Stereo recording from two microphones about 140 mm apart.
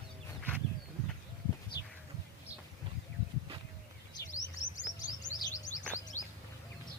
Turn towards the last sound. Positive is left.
turn(degrees=15)  # may be behind; listen again after turning